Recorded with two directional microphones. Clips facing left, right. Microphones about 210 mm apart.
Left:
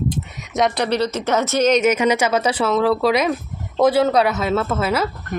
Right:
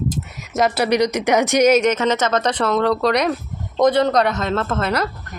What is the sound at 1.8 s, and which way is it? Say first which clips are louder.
Speech: left 1 dB; 10° left (ahead or behind).